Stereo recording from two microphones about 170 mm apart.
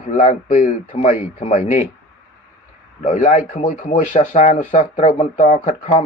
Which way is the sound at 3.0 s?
50° left (ahead or behind).